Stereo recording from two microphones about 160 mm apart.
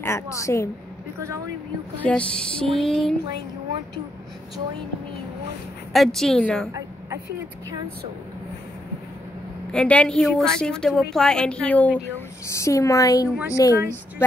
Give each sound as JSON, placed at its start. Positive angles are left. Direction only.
{"t": 0.0, "sound": "a woman's voice", "side_deg": 15}
{"t": 2.0, "sound": "a woman's voice", "side_deg": 5}
{"t": 5.9, "sound": "a woman's voice", "side_deg": 0}
{"t": 9.7, "sound": "a woman's voice", "side_deg": 5}